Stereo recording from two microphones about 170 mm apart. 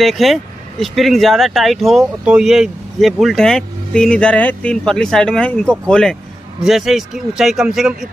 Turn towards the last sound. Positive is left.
turn(degrees=-5)  # may be behind; listen again after turning